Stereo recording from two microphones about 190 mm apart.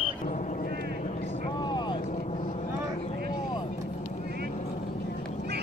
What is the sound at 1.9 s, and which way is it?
Vehicle, 40° left (ahead or behind).